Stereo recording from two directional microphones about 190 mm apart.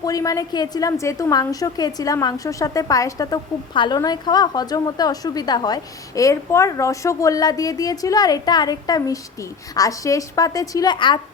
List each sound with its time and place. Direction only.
0.0 s a woman's voice: 20° left (ahead or behind)